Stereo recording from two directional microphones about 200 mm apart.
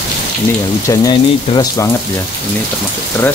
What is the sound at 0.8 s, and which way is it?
Speech, 20° left (ahead or behind).